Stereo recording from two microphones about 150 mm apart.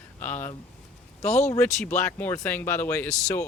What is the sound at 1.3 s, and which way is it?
Speech, 50° left (ahead or behind).